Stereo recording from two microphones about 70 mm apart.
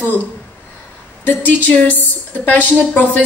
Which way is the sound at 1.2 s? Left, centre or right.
Left.